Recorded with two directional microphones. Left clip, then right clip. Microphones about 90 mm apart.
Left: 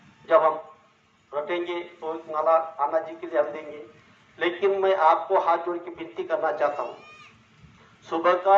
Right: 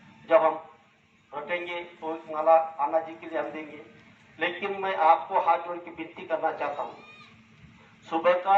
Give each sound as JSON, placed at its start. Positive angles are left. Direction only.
{"t": 0.3, "sound": "a man's voice", "side_deg": 30}
{"t": 8.1, "sound": "a man's voice", "side_deg": 35}